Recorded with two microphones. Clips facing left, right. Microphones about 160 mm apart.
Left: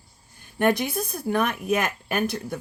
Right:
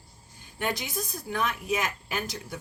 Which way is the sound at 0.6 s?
55° left (ahead or behind).